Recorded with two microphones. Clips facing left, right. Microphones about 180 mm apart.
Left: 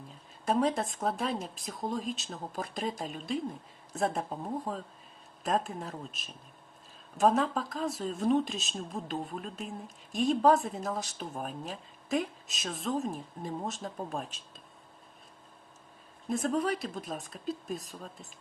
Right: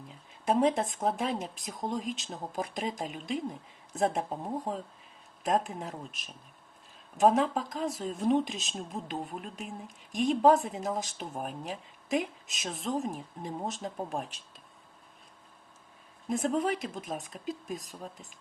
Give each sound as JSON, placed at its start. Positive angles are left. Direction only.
{"t": 0.4, "sound": "speech", "side_deg": -20}
{"t": 16.3, "sound": "speech", "side_deg": -20}